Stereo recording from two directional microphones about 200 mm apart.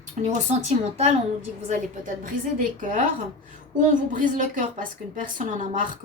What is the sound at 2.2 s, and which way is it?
A woman's voice, 40° right (ahead or behind).